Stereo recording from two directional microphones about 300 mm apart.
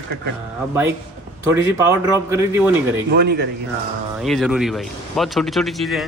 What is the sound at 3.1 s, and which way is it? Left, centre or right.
Speech, right.